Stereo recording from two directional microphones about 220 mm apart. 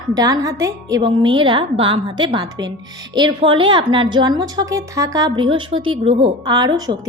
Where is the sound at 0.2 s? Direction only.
15° right (ahead or behind).